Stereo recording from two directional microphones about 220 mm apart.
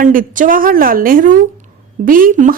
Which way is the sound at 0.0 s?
40° right (ahead or behind).